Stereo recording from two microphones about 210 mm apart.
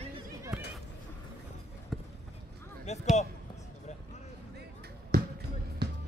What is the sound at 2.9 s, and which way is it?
Speech, 30° left (ahead or behind).